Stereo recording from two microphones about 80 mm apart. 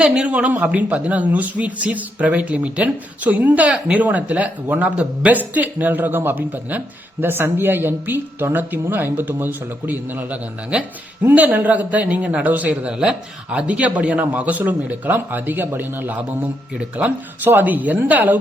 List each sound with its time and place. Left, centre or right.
0.0 s a man's voice: centre
12.9 s a man's voice: centre